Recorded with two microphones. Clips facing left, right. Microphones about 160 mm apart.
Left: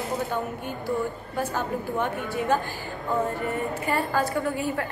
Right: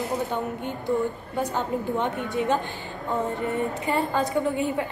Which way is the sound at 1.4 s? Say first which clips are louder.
Right 2 dB; 20° right (ahead or behind).